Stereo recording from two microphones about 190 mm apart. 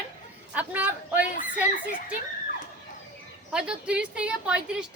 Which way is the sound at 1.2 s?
45° left (ahead or behind).